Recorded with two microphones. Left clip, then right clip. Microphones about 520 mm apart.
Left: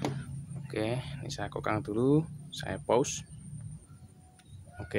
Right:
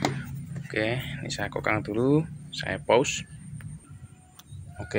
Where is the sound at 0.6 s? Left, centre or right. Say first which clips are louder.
Right 6 dB; left.